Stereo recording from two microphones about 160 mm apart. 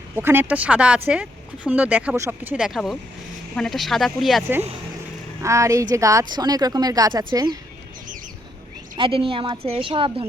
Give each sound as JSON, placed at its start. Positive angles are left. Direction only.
{"t": 0.2, "sound": "speech", "side_deg": -15}
{"t": 5.4, "sound": "a woman's voice", "side_deg": -20}
{"t": 9.0, "sound": "a woman's voice", "side_deg": -35}